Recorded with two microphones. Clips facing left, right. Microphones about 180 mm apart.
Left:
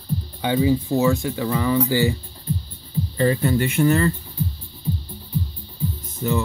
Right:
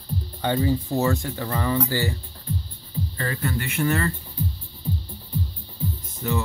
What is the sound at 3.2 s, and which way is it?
Speech, 20° left (ahead or behind).